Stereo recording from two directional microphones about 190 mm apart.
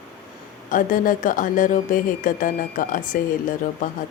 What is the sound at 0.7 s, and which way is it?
Speech, 45° left (ahead or behind).